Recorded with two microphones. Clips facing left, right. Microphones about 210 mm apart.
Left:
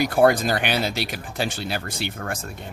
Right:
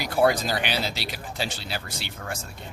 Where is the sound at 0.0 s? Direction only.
50° left (ahead or behind).